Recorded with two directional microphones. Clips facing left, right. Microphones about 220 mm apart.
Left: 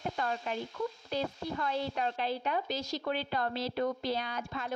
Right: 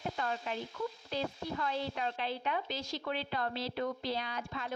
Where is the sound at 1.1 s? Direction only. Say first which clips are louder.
Left 2 dB; 45° left (ahead or behind).